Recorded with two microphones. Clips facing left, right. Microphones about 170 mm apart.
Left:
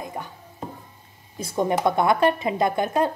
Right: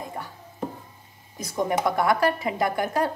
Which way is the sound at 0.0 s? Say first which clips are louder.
Left 2 dB; 20° left (ahead or behind).